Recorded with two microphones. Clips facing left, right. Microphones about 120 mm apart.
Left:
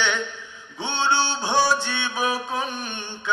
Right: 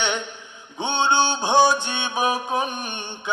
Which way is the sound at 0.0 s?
20° right (ahead or behind).